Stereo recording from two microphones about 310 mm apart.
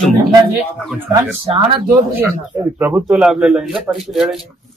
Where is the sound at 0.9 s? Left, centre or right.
Centre.